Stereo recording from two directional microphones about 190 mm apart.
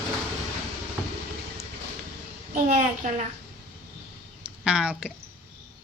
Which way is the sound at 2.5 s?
45° right (ahead or behind).